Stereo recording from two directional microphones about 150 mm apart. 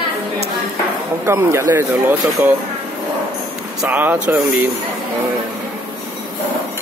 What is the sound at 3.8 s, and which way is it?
Speech, 10° right (ahead or behind).